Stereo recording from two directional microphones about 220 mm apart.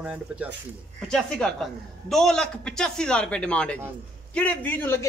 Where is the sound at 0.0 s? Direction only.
5° right (ahead or behind).